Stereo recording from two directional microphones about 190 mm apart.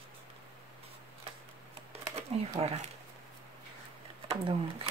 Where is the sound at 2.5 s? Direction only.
35° right (ahead or behind).